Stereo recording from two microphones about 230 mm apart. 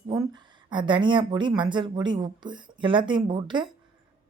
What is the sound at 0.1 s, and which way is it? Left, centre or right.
Speech, centre.